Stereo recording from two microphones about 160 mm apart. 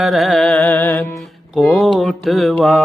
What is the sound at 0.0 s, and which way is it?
Carnatic music, centre (ahead or behind).